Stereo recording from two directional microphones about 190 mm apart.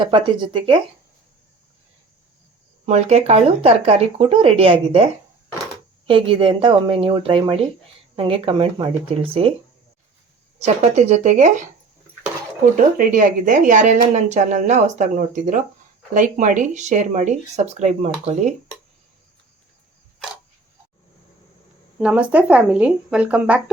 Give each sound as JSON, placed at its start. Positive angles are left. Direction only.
{"t": 0.0, "sound": "speech", "side_deg": -25}
{"t": 2.8, "sound": "speech", "side_deg": -35}
{"t": 10.8, "sound": "speech", "side_deg": -35}
{"t": 12.7, "sound": "speech", "side_deg": -45}
{"t": 21.9, "sound": "speech", "side_deg": -5}